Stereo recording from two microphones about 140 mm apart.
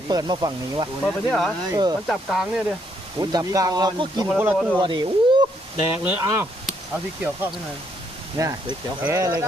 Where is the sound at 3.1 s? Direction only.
25° right (ahead or behind).